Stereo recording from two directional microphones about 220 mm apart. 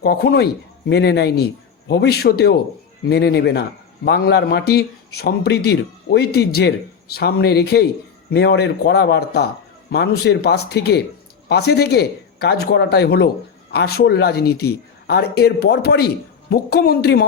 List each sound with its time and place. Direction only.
0.0 s speech: 45° left (ahead or behind)